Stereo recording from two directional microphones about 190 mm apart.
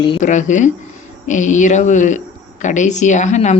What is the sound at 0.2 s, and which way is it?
Speech, 40° left (ahead or behind).